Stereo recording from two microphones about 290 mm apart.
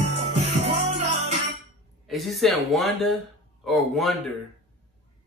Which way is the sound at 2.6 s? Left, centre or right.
Centre.